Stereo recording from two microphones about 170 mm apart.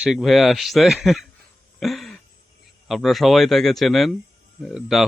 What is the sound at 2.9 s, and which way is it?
Speech, centre (ahead or behind).